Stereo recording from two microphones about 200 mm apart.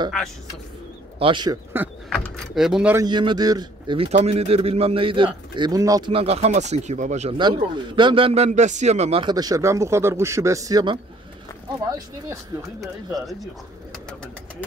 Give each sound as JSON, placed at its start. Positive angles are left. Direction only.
{"t": 1.2, "sound": "a man's voice", "side_deg": -20}
{"t": 2.0, "sound": "speech", "side_deg": 0}
{"t": 3.0, "sound": "a man's voice", "side_deg": -20}
{"t": 7.3, "sound": "a man's voice", "side_deg": -25}
{"t": 12.8, "sound": "speech", "side_deg": 0}